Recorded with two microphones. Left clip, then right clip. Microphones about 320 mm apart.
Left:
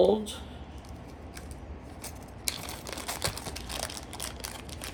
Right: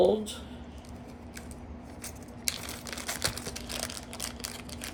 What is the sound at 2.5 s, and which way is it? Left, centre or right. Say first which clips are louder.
Crumpling: even; centre.